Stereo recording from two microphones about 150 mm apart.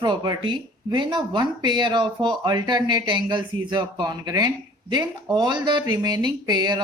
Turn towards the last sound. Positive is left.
turn(degrees=-30)  # may be behind; listen again after turning